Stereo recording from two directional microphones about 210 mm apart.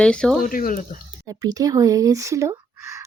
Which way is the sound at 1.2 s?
20° right (ahead or behind).